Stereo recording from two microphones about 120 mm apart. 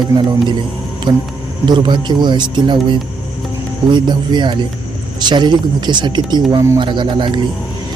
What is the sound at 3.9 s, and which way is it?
Speech, 40° right (ahead or behind).